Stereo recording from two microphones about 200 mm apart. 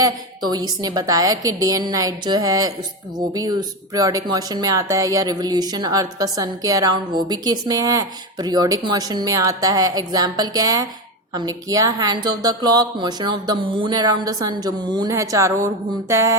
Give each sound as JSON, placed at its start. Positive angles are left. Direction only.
{"t": 0.0, "sound": "a woman's voice", "side_deg": -20}